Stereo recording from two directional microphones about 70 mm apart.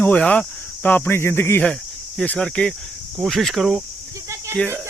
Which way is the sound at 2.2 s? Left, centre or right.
Centre.